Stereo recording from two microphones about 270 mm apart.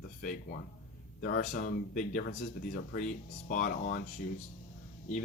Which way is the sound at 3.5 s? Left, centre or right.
Left.